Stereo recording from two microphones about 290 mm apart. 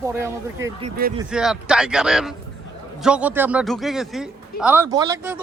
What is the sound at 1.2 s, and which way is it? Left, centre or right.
Speech, centre.